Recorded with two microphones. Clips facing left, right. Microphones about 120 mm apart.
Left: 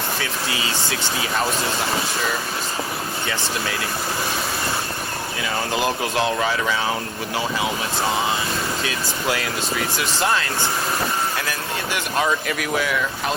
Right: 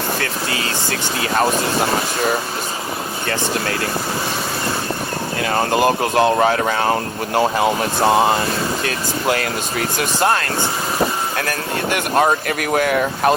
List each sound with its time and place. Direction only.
0.2 s speech: 55° right (ahead or behind)
5.4 s speech: 55° right (ahead or behind)